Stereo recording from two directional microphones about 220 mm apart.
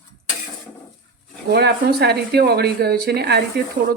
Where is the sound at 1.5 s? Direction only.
50° right (ahead or behind).